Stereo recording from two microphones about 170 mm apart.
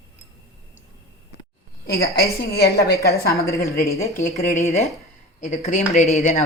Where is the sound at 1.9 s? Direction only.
65° left (ahead or behind).